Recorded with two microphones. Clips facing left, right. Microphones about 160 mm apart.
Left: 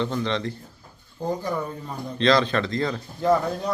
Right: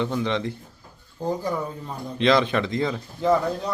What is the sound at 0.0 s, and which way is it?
Speech, 10° right (ahead or behind).